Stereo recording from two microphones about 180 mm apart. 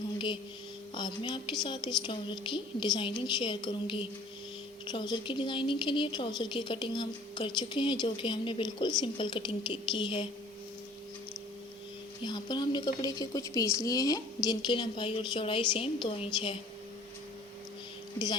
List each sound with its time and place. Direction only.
0.9 s a woman's voice: 25° left (ahead or behind)
12.2 s a woman's voice: 25° left (ahead or behind)